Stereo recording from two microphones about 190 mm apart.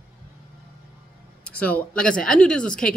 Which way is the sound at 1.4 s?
5° left (ahead or behind).